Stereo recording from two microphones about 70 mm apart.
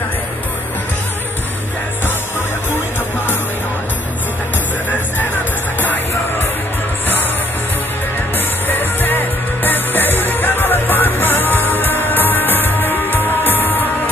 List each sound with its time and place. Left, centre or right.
8.6 s music: left